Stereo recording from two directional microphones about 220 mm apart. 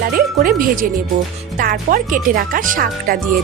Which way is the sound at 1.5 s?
40° right (ahead or behind).